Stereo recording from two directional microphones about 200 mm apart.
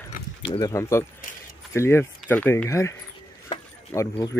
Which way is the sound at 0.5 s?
15° left (ahead or behind).